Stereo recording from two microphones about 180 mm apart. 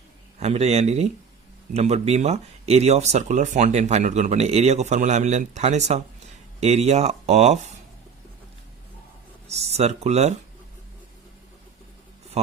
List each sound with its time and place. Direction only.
0.3 s a man's voice: 35° right (ahead or behind)
9.5 s speech: 35° right (ahead or behind)